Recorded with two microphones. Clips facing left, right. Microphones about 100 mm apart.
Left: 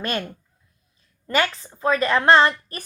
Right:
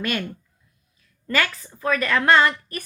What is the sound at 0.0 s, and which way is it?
A woman's voice, 35° left (ahead or behind).